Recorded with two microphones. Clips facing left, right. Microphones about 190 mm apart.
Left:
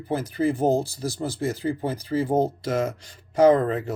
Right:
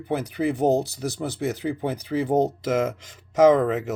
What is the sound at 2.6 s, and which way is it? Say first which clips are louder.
Speech: right 2 dB; 90° right.